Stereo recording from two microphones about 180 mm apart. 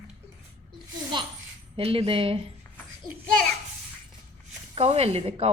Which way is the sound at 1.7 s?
30° right (ahead or behind).